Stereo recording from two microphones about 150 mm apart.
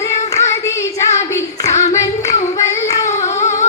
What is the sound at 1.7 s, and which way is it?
Female singing, 50° left (ahead or behind).